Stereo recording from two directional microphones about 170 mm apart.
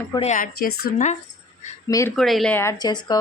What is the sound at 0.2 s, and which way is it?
Speech, 50° left (ahead or behind).